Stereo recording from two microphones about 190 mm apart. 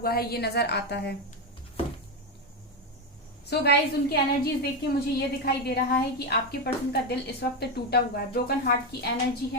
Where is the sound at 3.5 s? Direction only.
60° left (ahead or behind).